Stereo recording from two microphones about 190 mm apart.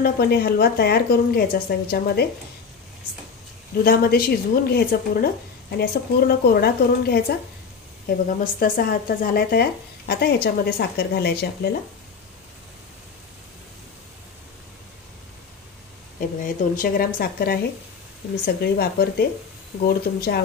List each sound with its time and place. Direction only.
0.0 s a woman's voice: 55° left (ahead or behind)
3.8 s a woman's voice: 55° left (ahead or behind)
8.5 s a woman's voice: 50° left (ahead or behind)
16.7 s a woman's voice: 50° left (ahead or behind)